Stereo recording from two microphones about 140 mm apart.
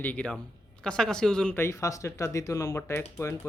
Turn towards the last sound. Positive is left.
turn(degrees=20)  # may be behind; listen again after turning